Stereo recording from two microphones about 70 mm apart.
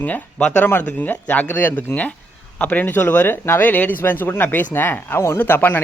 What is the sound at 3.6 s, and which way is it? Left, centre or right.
Speech, left.